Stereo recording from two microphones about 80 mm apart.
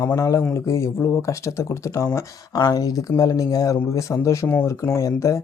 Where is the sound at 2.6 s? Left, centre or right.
Left.